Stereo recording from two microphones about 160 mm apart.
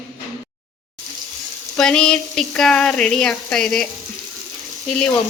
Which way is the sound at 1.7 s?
5° left (ahead or behind).